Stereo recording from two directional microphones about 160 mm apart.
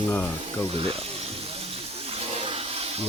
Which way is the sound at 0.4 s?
40° right (ahead or behind).